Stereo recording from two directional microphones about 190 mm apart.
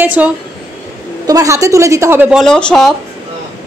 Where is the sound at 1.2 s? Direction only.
20° right (ahead or behind).